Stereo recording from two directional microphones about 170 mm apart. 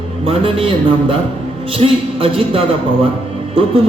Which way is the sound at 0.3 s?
30° right (ahead or behind).